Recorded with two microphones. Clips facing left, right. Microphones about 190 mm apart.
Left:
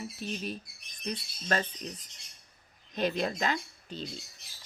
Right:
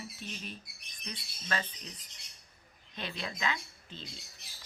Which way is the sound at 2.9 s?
45° left (ahead or behind).